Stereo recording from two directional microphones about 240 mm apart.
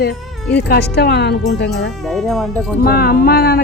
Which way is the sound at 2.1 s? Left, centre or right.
Centre.